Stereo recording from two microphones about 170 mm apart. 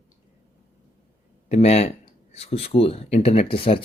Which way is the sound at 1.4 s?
40° left (ahead or behind).